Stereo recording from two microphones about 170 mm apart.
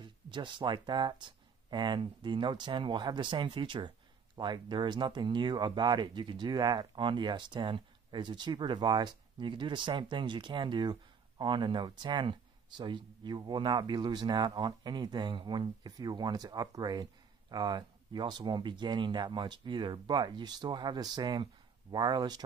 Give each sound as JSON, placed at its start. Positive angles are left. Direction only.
{"t": 0.0, "sound": "speech", "side_deg": -30}